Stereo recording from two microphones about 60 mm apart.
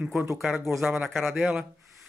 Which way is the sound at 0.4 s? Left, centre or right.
Centre.